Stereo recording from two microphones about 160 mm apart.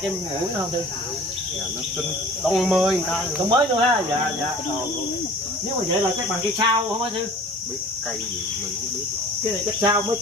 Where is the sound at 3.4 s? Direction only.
30° right (ahead or behind).